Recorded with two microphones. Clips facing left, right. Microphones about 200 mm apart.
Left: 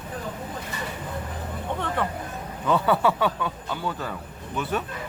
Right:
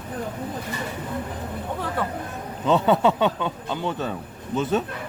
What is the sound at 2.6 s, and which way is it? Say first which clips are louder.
Speech: right 3 dB; 20° right (ahead or behind).